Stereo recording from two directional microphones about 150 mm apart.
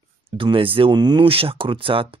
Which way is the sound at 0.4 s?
35° right (ahead or behind).